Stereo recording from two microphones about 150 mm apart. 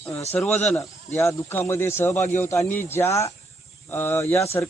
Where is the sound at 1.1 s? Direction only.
20° left (ahead or behind).